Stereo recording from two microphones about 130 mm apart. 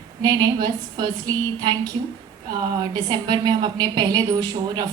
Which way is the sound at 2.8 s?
30° right (ahead or behind).